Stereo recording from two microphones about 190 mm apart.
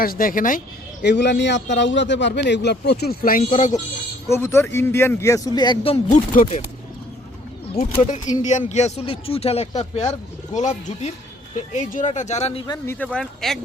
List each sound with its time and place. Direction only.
0.0 s speech: 50° left (ahead or behind)
1.0 s speech: 65° left (ahead or behind); by 3.8 s 40° left (ahead or behind)
4.3 s speech: 15° left (ahead or behind); by 6.1 s 30° left (ahead or behind)
6.3 s speech: 45° left (ahead or behind)
8.4 s speech: 40° left (ahead or behind); by 13.6 s 5° left (ahead or behind)